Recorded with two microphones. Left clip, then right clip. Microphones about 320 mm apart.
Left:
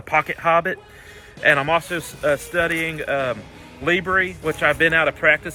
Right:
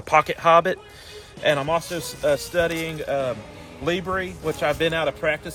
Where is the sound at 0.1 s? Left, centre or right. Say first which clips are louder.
Right 2 dB; centre.